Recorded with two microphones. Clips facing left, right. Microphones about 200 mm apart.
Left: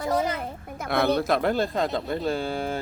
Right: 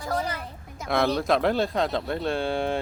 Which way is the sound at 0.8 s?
60° left (ahead or behind).